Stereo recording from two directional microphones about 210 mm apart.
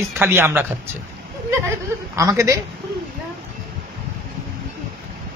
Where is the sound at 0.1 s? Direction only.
10° right (ahead or behind).